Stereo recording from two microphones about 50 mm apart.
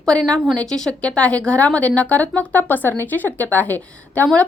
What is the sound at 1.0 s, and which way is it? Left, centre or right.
A woman's voice, left.